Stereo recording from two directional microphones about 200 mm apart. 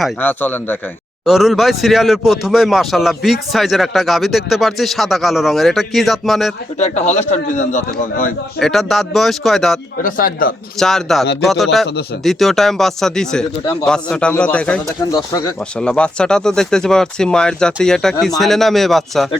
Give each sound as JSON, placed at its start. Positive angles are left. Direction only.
{"t": 0.0, "sound": "a man's voice", "side_deg": 10}
{"t": 1.2, "sound": "speech", "side_deg": 0}
{"t": 6.7, "sound": "a man's voice", "side_deg": 35}
{"t": 8.5, "sound": "speech", "side_deg": 0}
{"t": 10.0, "sound": "speech", "side_deg": 45}
{"t": 10.8, "sound": "speech", "side_deg": 0}
{"t": 15.1, "sound": "speech", "side_deg": 20}
{"t": 15.8, "sound": "speech", "side_deg": 5}